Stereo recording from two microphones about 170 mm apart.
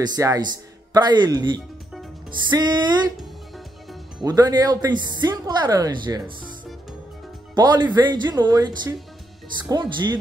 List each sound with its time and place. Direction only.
0.0 s a woman's voice: 20° right (ahead or behind)
4.2 s a woman's voice: 20° right (ahead or behind)
7.5 s a woman's voice: 25° right (ahead or behind)